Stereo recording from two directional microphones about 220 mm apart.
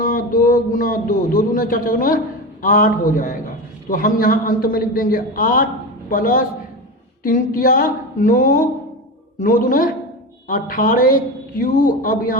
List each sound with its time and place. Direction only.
0.0 s a woman's voice: 40° left (ahead or behind)